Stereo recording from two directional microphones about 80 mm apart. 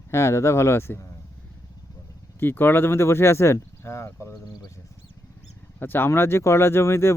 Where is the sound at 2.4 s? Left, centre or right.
Left.